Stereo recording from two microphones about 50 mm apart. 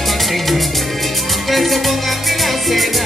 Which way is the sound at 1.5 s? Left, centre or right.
Centre.